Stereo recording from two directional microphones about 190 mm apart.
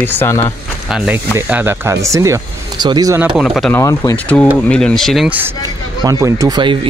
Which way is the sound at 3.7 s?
15° left (ahead or behind).